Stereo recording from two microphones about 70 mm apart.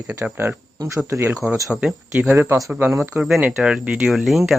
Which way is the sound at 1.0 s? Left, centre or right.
Right.